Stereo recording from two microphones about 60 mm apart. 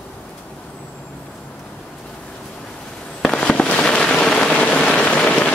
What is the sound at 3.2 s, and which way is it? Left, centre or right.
Fireworks, centre.